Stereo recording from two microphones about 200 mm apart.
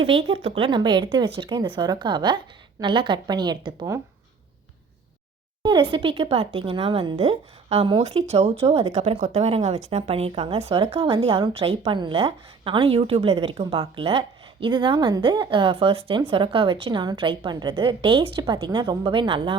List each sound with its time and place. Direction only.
0.0 s speech: 30° right (ahead or behind)
5.6 s speech: 25° right (ahead or behind)